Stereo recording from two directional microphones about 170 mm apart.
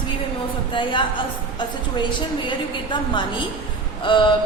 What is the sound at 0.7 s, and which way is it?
Speech, 30° left (ahead or behind).